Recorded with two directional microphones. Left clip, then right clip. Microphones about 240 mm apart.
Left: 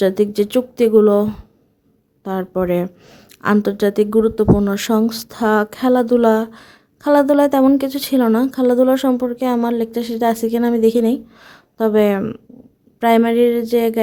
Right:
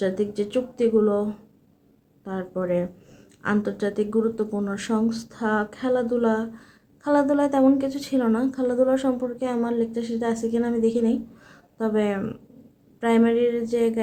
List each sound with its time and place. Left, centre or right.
0.0 s a woman's voice: left